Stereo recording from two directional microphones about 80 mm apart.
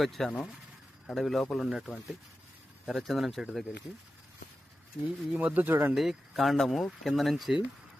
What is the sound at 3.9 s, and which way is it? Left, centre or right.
Speech, centre.